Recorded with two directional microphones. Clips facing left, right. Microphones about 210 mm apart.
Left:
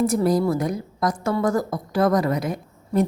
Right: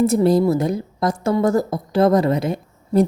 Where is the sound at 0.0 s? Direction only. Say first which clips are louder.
Right 4 dB; 25° right (ahead or behind).